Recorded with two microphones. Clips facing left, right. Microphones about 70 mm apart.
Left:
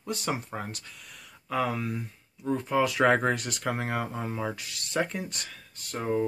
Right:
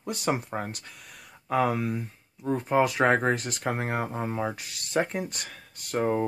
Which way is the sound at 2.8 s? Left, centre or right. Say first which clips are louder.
Right 1 dB; right.